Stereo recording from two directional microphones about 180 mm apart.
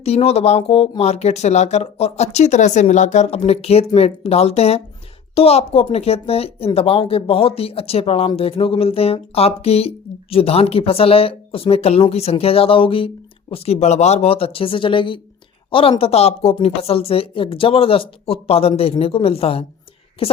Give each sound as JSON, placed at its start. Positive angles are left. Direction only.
{"t": 0.0, "sound": "speech", "side_deg": 35}